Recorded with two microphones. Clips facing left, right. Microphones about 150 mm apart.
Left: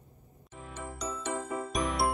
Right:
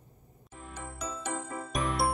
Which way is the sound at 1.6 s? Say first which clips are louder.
Right 1 dB; centre (ahead or behind).